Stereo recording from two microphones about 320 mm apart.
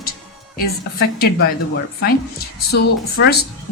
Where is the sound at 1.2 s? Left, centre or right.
Left.